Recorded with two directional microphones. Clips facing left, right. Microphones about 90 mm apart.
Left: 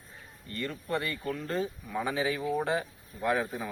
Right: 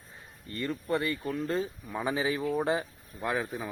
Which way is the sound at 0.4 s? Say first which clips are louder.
Right 3 dB; 25° right (ahead or behind).